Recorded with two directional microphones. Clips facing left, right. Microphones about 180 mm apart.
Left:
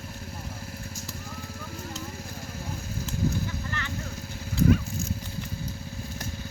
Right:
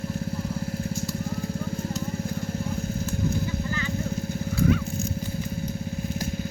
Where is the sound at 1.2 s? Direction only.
25° right (ahead or behind).